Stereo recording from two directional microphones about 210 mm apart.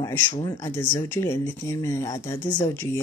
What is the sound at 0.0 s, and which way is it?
Speech, 20° left (ahead or behind).